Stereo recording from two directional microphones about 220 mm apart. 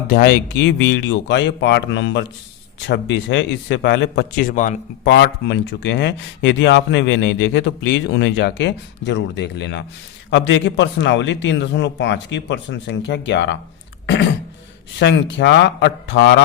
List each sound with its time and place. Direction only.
0.1 s speech: 45° left (ahead or behind)
5.0 s speech: 50° left (ahead or behind)
14.9 s speech: 50° left (ahead or behind)